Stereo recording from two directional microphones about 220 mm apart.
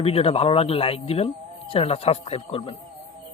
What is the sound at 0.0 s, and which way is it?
Speech, 25° left (ahead or behind).